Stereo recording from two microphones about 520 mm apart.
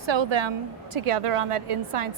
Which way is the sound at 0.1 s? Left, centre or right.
Right.